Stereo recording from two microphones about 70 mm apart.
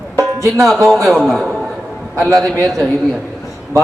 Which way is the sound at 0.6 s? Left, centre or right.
Centre.